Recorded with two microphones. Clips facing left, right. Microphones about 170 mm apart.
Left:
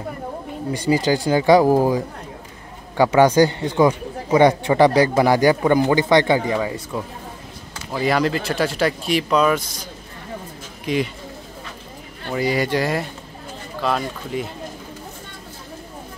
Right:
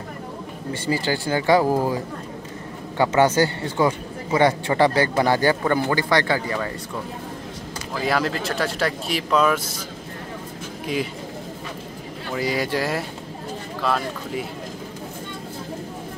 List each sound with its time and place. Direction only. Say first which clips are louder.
0.8 s speech: left 5 dB; 15° left (ahead or behind)
3.0 s speech: left 4 dB; 15° left (ahead or behind)
7.9 s speech: left 4 dB; centre (ahead or behind)
10.9 s speech: left 4 dB; 5° right (ahead or behind)
12.4 s speech: left 3 dB; centre (ahead or behind)
14.3 s speech: left 4 dB; 5° right (ahead or behind)